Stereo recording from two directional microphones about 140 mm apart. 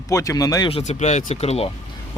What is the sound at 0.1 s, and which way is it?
Speech, 25° left (ahead or behind).